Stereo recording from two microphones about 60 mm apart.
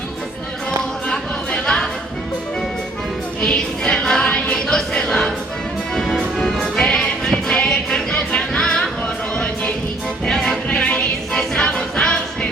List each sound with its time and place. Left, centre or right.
1.0 s chatter: centre
3.4 s music: centre
10.7 s music: centre